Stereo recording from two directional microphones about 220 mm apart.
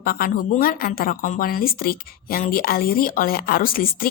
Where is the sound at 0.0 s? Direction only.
40° left (ahead or behind).